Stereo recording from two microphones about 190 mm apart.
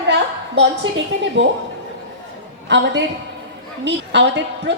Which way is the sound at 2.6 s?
70° right (ahead or behind).